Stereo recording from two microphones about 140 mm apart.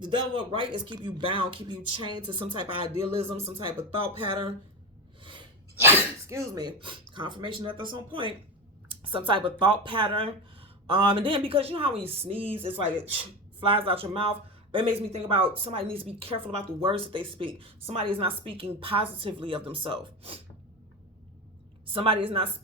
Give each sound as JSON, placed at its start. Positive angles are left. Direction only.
{"t": 0.0, "sound": "a woman's voice", "side_deg": -35}
{"t": 5.7, "sound": "a woman's voice", "side_deg": -20}
{"t": 21.8, "sound": "a woman's voice", "side_deg": -40}